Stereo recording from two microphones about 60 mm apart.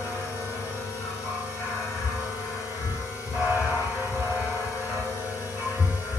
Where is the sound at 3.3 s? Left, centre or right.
Left.